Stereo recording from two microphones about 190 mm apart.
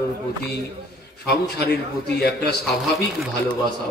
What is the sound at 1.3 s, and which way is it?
A man's voice, 60° left (ahead or behind).